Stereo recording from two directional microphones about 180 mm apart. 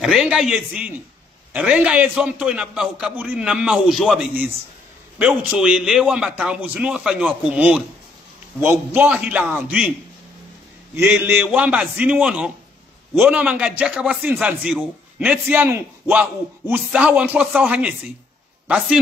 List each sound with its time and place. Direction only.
0.0 s a man's voice: centre (ahead or behind)
11.0 s a man's voice: 10° right (ahead or behind)